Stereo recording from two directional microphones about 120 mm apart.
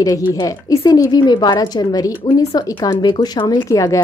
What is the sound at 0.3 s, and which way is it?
A woman's voice, 30° left (ahead or behind).